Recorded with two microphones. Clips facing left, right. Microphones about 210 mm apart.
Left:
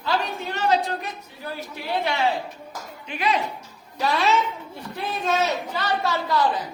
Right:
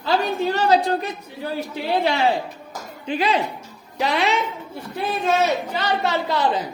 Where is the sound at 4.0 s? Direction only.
20° right (ahead or behind).